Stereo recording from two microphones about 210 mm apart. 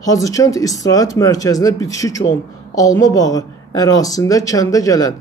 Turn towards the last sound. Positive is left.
turn(degrees=15)  # may be behind; listen again after turning